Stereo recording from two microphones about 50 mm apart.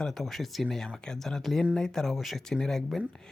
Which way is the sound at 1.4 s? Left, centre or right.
Centre.